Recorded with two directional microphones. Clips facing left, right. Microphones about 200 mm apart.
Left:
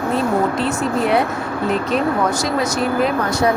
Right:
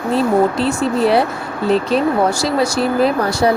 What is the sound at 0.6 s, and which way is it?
Speech, 30° right (ahead or behind).